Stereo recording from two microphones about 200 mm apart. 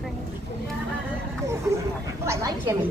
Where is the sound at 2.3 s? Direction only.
15° right (ahead or behind).